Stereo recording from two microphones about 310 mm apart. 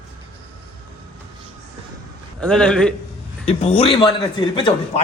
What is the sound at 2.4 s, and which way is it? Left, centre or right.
Speech, centre.